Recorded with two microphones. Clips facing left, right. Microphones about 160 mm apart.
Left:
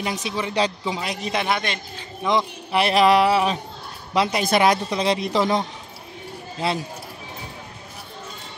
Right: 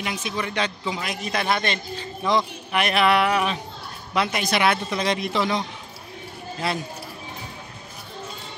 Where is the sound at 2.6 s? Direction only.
30° left (ahead or behind).